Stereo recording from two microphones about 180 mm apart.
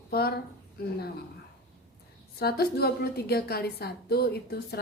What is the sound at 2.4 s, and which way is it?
A woman's voice, 60° left (ahead or behind).